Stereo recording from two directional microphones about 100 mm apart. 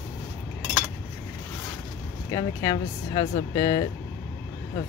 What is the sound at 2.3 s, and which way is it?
Speech, 45° left (ahead or behind).